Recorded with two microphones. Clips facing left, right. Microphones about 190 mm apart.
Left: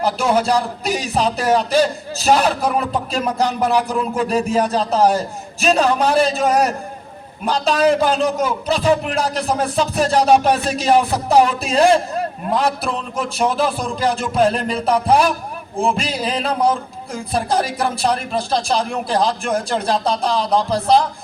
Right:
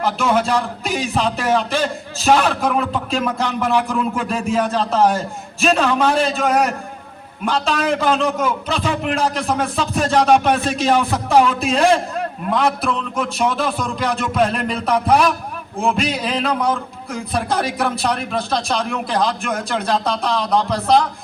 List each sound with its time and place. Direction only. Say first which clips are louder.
0.0 s speech: left 1 dB; 35° left (ahead or behind)